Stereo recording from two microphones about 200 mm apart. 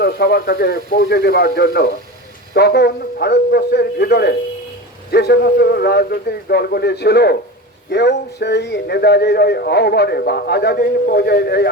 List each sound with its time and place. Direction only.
0.0 s speech: 55° left (ahead or behind)